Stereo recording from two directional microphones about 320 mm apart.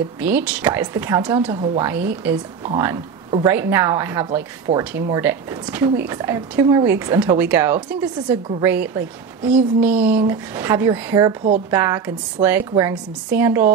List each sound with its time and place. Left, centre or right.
0.2 s a woman's voice: centre